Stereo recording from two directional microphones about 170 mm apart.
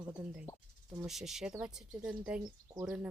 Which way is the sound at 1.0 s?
Centre (ahead or behind).